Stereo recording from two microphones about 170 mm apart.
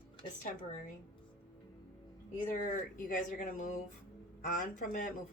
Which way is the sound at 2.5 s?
55° left (ahead or behind).